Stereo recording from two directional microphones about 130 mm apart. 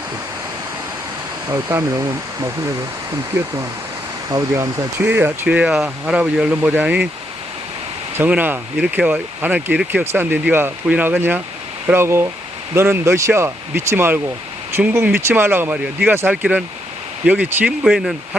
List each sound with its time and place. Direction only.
1.5 s speech: 25° right (ahead or behind)
4.3 s speech: 30° right (ahead or behind); by 7.1 s 10° right (ahead or behind)
8.2 s speech: 15° right (ahead or behind)